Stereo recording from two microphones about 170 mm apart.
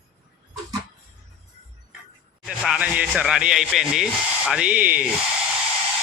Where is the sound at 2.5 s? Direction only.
5° right (ahead or behind).